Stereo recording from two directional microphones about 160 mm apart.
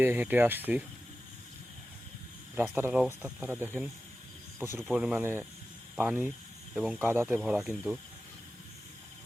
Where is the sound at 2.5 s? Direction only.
10° right (ahead or behind).